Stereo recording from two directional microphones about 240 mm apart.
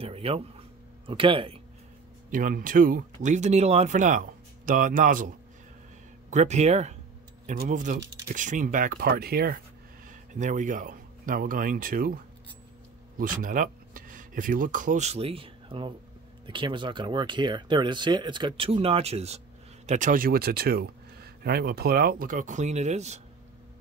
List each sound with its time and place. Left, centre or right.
0.0 s speech: right
2.3 s speech: right
6.3 s speech: right
13.2 s speech: right